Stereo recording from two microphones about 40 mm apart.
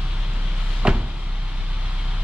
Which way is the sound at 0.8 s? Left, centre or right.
Right.